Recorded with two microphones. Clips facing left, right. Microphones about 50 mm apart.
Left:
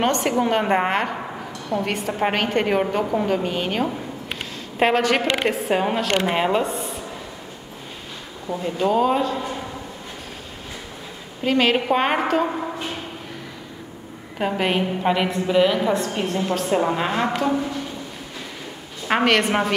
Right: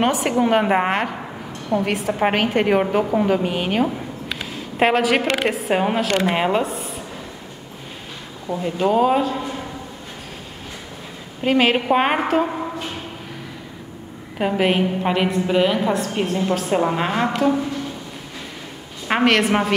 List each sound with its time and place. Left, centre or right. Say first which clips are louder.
0.0 s a woman's voice: right 2 dB; centre
5.2 s a woman's voice: right 1 dB; right
5.5 s a woman's voice: right 1 dB; centre
8.5 s a woman's voice: right 2 dB; centre
11.4 s a woman's voice: right 2 dB; centre
14.4 s a woman's voice: right 3 dB; centre
19.0 s a woman's voice: right 1 dB; centre